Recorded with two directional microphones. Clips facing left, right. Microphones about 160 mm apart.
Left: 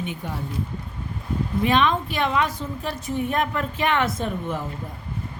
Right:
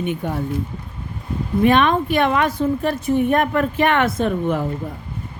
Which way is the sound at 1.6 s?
55° right (ahead or behind).